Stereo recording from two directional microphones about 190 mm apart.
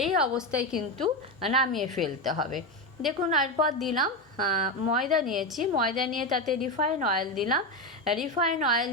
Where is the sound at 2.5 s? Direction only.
Centre (ahead or behind).